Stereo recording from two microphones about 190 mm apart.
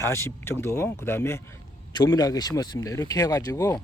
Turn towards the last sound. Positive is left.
turn(degrees=15)  # may be behind; listen again after turning